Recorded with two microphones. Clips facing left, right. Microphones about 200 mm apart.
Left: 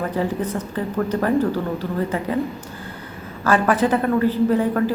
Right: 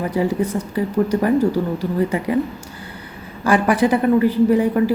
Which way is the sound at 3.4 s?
15° right (ahead or behind).